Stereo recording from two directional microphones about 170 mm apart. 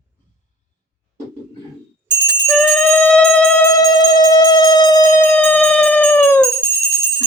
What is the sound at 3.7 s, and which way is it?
Music, 20° left (ahead or behind).